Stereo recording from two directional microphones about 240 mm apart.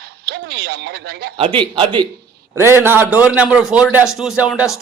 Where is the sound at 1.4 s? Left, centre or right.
Right; by 4.6 s centre.